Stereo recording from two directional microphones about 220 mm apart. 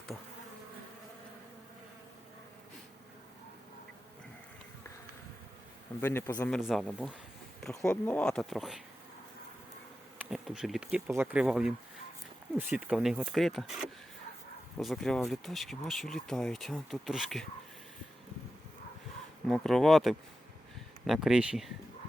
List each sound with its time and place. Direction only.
6.0 s speech: 10° left (ahead or behind)
7.6 s bee: centre (ahead or behind)
10.2 s bee: centre (ahead or behind)
14.8 s bee: centre (ahead or behind)
19.5 s bee: centre (ahead or behind)